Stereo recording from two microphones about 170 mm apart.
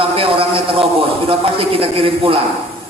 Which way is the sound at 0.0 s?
30° right (ahead or behind).